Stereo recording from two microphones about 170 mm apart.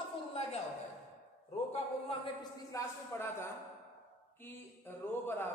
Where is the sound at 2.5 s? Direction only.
15° left (ahead or behind).